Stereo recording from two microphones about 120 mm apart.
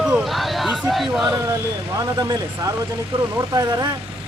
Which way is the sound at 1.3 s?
25° right (ahead or behind).